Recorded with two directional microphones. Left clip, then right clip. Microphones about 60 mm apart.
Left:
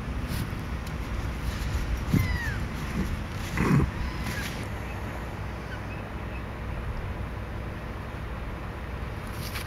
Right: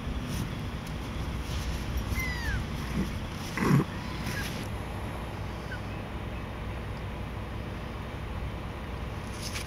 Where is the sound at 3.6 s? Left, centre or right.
Centre.